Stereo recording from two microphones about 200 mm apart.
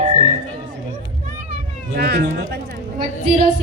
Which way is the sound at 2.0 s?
50° right (ahead or behind).